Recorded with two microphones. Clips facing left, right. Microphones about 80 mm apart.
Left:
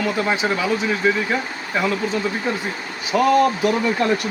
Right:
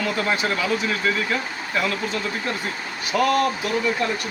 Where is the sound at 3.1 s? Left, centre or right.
Centre.